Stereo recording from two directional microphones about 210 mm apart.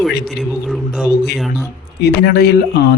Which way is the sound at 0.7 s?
Centre (ahead or behind).